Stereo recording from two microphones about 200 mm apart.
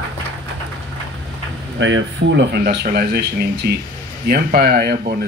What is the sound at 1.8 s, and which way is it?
Speech, 65° right (ahead or behind).